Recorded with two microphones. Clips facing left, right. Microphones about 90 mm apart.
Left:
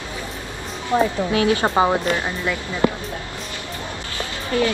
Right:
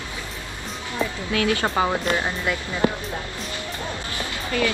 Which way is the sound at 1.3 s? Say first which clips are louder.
Left 4 dB; 25° left (ahead or behind).